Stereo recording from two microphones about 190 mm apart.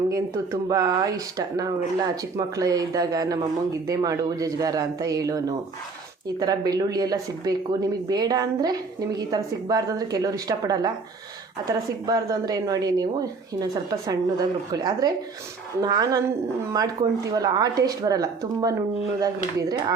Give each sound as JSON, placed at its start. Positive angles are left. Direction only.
{"t": 0.1, "sound": "speech", "side_deg": -15}